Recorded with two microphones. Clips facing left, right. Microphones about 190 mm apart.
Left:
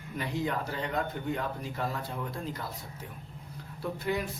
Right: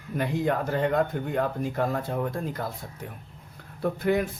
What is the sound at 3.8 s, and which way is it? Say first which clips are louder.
Speech: right 7 dB; 55° right (ahead or behind).